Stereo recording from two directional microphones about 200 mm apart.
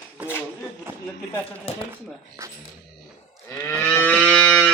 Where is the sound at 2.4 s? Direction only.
15° right (ahead or behind).